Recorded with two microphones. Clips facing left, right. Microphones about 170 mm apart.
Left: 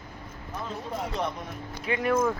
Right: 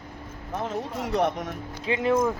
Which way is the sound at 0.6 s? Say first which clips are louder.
Right 3 dB; 65° right (ahead or behind).